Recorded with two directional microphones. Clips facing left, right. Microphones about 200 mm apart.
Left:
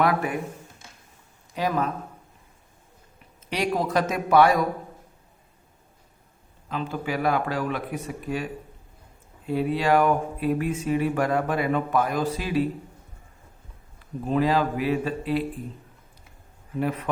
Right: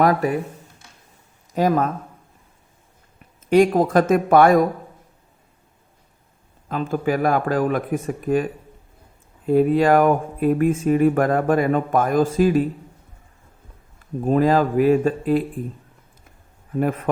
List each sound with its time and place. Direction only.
0.0 s speech: 40° right (ahead or behind)
1.5 s speech: 45° right (ahead or behind)
3.5 s speech: 50° right (ahead or behind)
6.7 s speech: 50° right (ahead or behind)
9.5 s speech: 50° right (ahead or behind)
14.3 s speech: 50° right (ahead or behind)
16.7 s speech: 50° right (ahead or behind)